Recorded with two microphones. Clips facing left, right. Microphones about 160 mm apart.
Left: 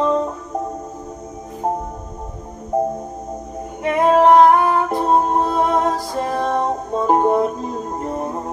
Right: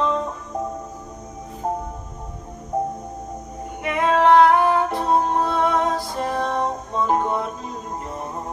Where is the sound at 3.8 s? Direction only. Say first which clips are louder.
Left 4 dB; 40° left (ahead or behind).